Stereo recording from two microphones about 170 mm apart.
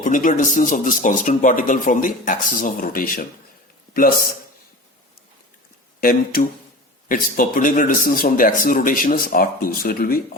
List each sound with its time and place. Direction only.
0.0 s speech: 50° left (ahead or behind)
6.0 s speech: 60° left (ahead or behind)